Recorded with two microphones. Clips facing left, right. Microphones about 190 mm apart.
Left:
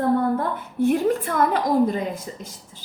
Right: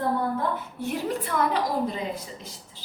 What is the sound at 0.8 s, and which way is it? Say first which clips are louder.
Speech: left 12 dB; 50° left (ahead or behind).